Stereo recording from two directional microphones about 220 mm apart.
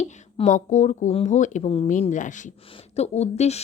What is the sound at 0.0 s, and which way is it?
Speech, 30° left (ahead or behind).